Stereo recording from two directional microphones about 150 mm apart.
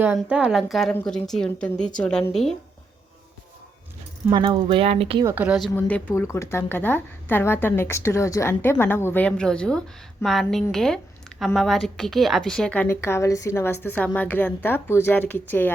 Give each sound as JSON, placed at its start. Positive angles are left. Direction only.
{"t": 0.0, "sound": "a woman's voice", "side_deg": -5}
{"t": 4.3, "sound": "speech", "side_deg": -30}
{"t": 5.2, "sound": "a woman's voice", "side_deg": -10}
{"t": 5.7, "sound": "a woman's voice", "side_deg": 10}